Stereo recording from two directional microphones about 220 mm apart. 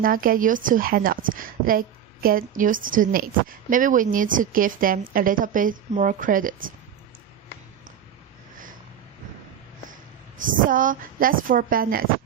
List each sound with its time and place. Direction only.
0.0 s a woman's voice: 40° right (ahead or behind)
10.5 s a woman's voice: 40° right (ahead or behind)